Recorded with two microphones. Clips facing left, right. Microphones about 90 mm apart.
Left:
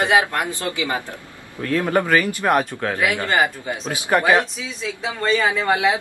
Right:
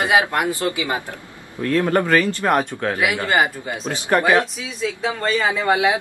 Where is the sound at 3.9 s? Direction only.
5° left (ahead or behind).